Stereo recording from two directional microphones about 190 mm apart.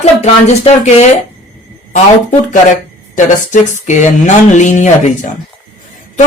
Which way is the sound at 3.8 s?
40° left (ahead or behind).